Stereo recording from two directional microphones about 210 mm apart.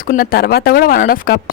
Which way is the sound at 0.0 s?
40° left (ahead or behind).